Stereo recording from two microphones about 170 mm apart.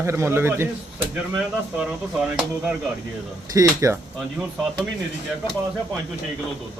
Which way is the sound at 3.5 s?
20° right (ahead or behind).